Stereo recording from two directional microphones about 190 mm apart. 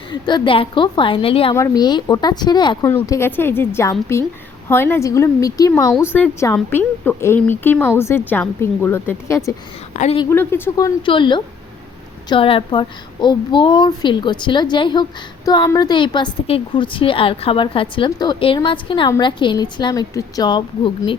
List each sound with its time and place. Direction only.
0.1 s a woman's voice: 25° left (ahead or behind)
1.5 s a woman's voice: 15° left (ahead or behind)
5.9 s a woman's voice: 5° right (ahead or behind)
6.1 s a woman's voice: 10° left (ahead or behind)
9.9 s a woman's voice: 35° left (ahead or behind)
10.2 s a woman's voice: 10° left (ahead or behind)